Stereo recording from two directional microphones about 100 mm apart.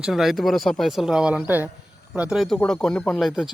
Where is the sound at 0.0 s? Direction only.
5° right (ahead or behind).